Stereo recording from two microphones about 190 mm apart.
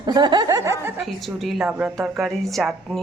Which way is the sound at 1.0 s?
Centre (ahead or behind).